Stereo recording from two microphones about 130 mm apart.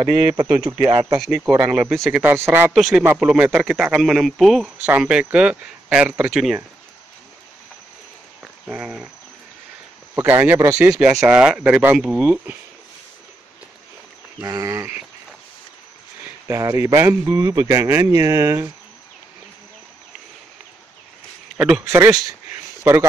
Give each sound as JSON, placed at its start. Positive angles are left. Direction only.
{"t": 0.0, "sound": "speech", "side_deg": -35}
{"t": 1.1, "sound": "a man's voice", "side_deg": 0}
{"t": 2.2, "sound": "speech", "side_deg": -15}
{"t": 2.7, "sound": "a man's voice", "side_deg": 0}
{"t": 8.4, "sound": "cricket", "side_deg": -5}
{"t": 10.1, "sound": "speech", "side_deg": -20}
{"t": 11.2, "sound": "speech", "side_deg": -5}
{"t": 14.4, "sound": "speech", "side_deg": -25}
{"t": 16.4, "sound": "speech", "side_deg": -20}
{"t": 21.5, "sound": "speech", "side_deg": -5}
{"t": 21.8, "sound": "speech", "side_deg": -20}